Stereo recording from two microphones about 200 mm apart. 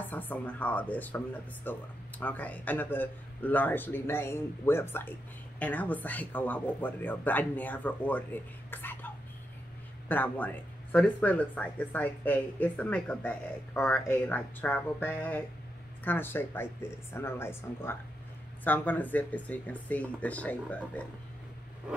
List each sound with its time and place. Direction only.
0.1 s speech: 10° left (ahead or behind)